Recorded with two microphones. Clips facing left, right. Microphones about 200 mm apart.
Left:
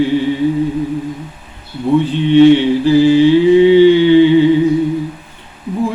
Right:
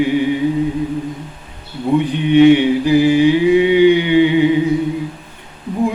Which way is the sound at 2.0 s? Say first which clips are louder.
Left 2 dB; 15° right (ahead or behind).